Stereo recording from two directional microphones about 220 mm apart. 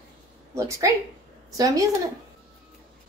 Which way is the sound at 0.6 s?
15° right (ahead or behind).